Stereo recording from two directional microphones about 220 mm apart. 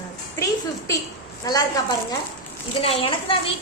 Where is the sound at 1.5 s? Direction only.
15° left (ahead or behind).